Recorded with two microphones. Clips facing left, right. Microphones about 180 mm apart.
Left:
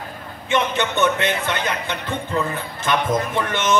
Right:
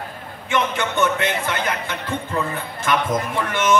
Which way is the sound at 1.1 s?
25° left (ahead or behind).